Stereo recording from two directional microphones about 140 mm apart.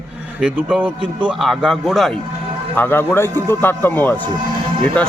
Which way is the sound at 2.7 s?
15° left (ahead or behind).